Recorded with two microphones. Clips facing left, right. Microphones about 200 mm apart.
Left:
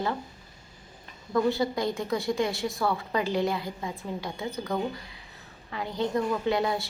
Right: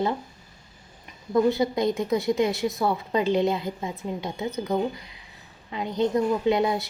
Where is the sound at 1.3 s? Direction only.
20° right (ahead or behind).